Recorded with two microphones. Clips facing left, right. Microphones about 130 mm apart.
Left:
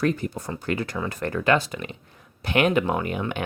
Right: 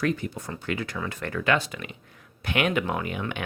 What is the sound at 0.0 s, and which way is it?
Speech, 40° left (ahead or behind).